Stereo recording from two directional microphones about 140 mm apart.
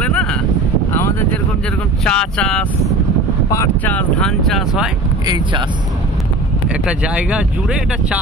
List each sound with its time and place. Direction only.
0.0 s a sound: 10° left (ahead or behind)
2.0 s speech: 5° left (ahead or behind)
3.5 s speech: 15° left (ahead or behind)
5.2 s speech: 30° right (ahead or behind)
6.7 s speech: 5° right (ahead or behind)